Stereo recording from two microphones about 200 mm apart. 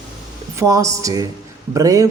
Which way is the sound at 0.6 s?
15° right (ahead or behind).